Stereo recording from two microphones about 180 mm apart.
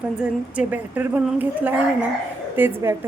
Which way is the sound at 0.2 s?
10° right (ahead or behind).